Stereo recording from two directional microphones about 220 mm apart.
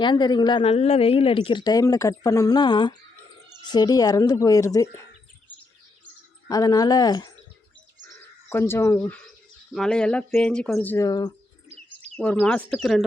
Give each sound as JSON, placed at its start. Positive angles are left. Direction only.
{"t": 0.0, "sound": "a woman's voice", "side_deg": 20}
{"t": 6.5, "sound": "a woman's voice", "side_deg": 15}
{"t": 8.4, "sound": "a woman's voice", "side_deg": 10}
{"t": 10.9, "sound": "a woman's voice", "side_deg": 15}
{"t": 12.1, "sound": "speech", "side_deg": 5}